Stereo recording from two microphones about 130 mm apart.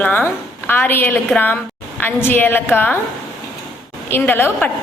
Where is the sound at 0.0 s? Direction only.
15° left (ahead or behind).